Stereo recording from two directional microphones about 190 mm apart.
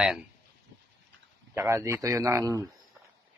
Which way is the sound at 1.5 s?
15° right (ahead or behind).